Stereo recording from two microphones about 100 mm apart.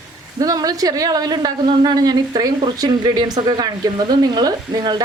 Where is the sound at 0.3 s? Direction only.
35° right (ahead or behind).